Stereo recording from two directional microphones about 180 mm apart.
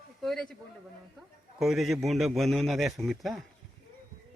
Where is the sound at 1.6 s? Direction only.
Centre (ahead or behind).